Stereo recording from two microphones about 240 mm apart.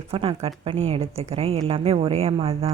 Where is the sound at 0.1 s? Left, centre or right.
Right.